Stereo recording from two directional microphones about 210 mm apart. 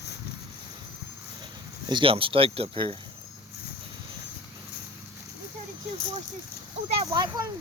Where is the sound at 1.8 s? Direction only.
25° right (ahead or behind).